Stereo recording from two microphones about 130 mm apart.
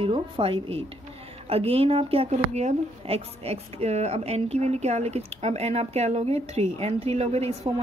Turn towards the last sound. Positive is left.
turn(degrees=-50)  # may be behind; listen again after turning